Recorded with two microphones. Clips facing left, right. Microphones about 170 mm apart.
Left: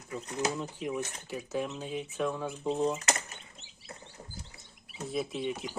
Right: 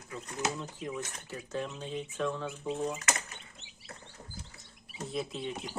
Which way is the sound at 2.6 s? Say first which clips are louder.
Left 5 dB; 30° left (ahead or behind).